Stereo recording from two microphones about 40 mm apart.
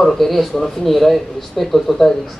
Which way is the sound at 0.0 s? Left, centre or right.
Centre.